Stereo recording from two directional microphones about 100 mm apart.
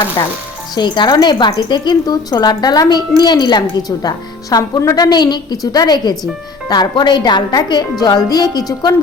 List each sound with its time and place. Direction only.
0.2 s a woman's voice: 40° left (ahead or behind)